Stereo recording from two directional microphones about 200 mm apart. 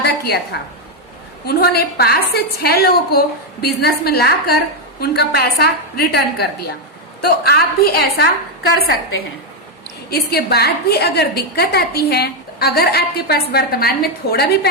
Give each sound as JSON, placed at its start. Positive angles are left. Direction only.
{"t": 0.0, "sound": "a woman's voice", "side_deg": 55}
{"t": 1.5, "sound": "a woman's voice", "side_deg": 50}
{"t": 10.1, "sound": "a woman's voice", "side_deg": 55}